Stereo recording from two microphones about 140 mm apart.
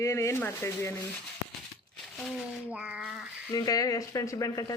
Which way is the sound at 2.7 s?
10° right (ahead or behind).